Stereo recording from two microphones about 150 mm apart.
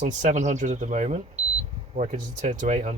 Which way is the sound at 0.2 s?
50° right (ahead or behind).